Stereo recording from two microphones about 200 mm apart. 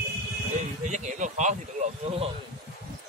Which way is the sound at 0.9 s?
40° right (ahead or behind).